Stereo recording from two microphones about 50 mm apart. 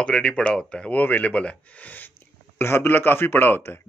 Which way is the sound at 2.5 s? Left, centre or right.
Left.